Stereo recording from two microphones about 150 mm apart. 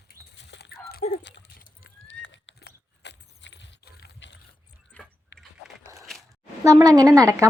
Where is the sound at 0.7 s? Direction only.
90° left.